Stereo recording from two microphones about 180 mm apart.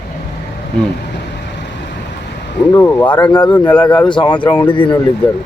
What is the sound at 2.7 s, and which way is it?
Speech, 10° left (ahead or behind).